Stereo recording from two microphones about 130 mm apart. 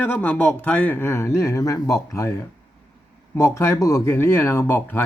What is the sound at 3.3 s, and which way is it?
Speech, 20° left (ahead or behind).